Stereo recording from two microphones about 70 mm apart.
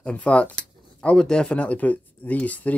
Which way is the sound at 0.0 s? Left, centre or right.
Centre.